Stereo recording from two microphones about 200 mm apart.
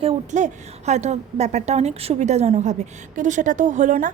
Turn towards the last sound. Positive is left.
turn(degrees=-40)  # may be behind; listen again after turning